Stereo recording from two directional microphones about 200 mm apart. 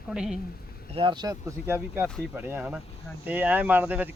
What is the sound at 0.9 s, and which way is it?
Speech, 25° right (ahead or behind).